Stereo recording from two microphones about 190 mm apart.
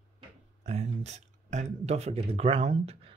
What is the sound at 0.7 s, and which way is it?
Speech, 35° right (ahead or behind).